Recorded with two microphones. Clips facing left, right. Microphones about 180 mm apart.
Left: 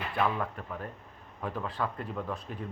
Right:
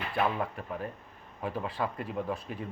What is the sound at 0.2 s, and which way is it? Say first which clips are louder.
Speech: even; 25° right (ahead or behind).